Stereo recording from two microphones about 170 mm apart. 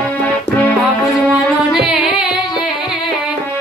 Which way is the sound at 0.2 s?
10° left (ahead or behind).